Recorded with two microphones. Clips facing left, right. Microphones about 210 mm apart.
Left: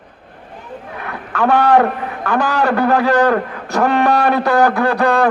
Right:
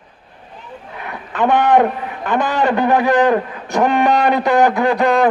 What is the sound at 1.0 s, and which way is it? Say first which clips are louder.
A man's voice: even; 20° right (ahead or behind).